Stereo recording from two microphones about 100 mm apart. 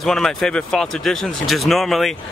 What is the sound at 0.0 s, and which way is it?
Speech, 5° left (ahead or behind).